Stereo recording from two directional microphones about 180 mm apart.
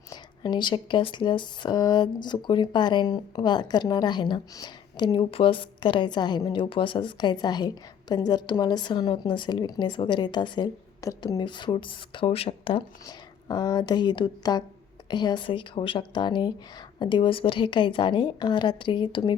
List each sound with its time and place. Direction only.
0.1 s speech: 25° left (ahead or behind)